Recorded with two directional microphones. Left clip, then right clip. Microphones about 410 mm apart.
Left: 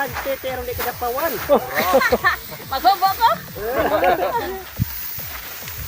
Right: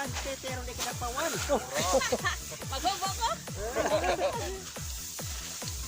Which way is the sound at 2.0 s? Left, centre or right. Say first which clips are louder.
Left 13 dB; right.